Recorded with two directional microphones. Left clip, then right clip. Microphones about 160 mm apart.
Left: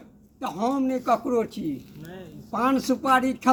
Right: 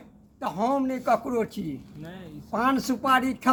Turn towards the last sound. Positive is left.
turn(degrees=-20)  # may be behind; listen again after turning